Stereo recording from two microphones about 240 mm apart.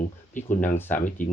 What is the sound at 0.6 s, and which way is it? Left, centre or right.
Speech, centre.